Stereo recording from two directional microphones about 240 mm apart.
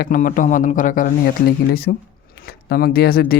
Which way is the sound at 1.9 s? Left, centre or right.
Left.